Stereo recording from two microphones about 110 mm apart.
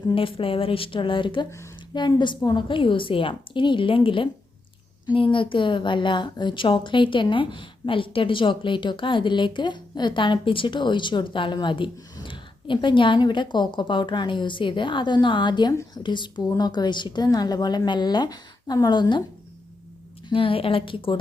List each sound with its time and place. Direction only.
0.1 s a woman's voice: 55° left (ahead or behind)
20.3 s a woman's voice: 55° left (ahead or behind)